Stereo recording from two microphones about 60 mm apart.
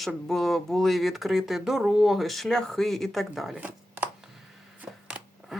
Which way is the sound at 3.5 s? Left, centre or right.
Right.